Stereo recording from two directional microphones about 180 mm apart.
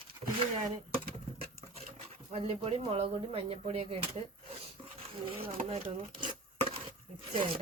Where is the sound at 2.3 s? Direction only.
35° right (ahead or behind).